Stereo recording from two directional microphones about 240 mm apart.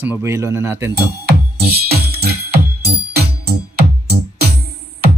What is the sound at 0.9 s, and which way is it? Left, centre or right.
Music, right.